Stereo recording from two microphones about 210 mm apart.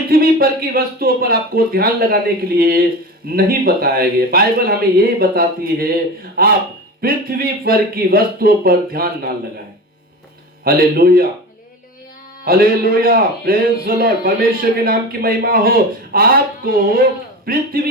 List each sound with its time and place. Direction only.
0.1 s a man's voice: 45° right (ahead or behind)
10.6 s a man's voice: 45° right (ahead or behind)
12.5 s a man's voice: 45° right (ahead or behind)